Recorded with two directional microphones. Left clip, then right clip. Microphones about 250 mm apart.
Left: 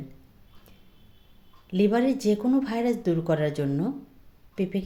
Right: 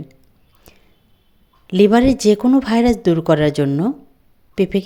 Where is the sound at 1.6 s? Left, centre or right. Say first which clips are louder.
Right 11 dB; right.